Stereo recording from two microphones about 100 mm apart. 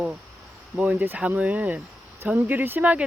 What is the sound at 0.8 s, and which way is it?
Speech, 15° right (ahead or behind).